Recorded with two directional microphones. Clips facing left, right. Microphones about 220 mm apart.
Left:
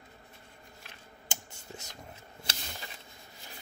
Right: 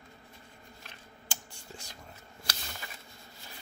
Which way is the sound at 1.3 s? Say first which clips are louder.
Left 2 dB; 20° left (ahead or behind).